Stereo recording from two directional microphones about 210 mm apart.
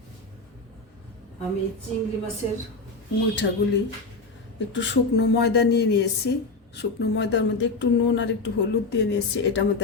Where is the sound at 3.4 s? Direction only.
60° left (ahead or behind).